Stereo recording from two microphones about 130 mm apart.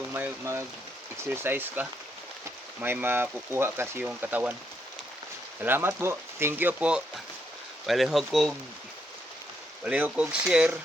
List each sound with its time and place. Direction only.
0.1 s speech: 20° right (ahead or behind)
5.6 s speech: 15° right (ahead or behind); by 8.5 s centre (ahead or behind)
9.8 s speech: 10° right (ahead or behind)